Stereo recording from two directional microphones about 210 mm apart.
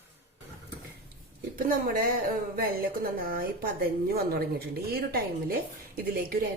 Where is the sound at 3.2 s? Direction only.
45° right (ahead or behind).